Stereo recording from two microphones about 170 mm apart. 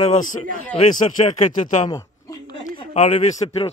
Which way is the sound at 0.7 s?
35° left (ahead or behind).